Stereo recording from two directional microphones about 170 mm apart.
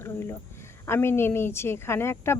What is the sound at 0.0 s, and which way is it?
A woman's voice, 15° left (ahead or behind).